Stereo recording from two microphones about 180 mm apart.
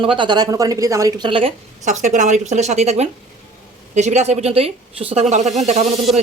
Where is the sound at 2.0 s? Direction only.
45° right (ahead or behind).